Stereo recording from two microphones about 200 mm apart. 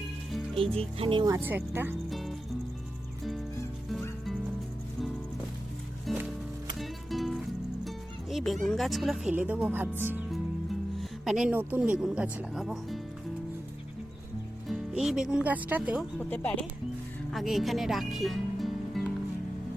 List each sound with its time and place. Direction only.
0.5 s speech: 30° right (ahead or behind); by 2.0 s 10° right (ahead or behind)
2.0 s music: centre (ahead or behind)
6.1 s music: centre (ahead or behind)
8.6 s speech: centre (ahead or behind)
14.7 s speech: 5° right (ahead or behind)
16.3 s speech: 10° left (ahead or behind)